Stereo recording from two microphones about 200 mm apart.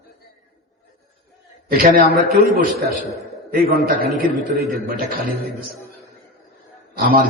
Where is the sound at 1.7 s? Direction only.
45° right (ahead or behind).